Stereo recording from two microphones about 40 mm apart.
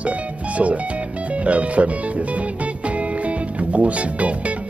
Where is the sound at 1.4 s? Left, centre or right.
Right.